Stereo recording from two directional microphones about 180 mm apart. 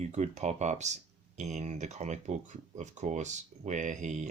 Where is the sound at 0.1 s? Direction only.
40° right (ahead or behind).